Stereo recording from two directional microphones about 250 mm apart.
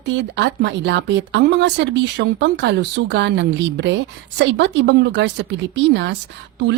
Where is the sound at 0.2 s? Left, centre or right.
Right.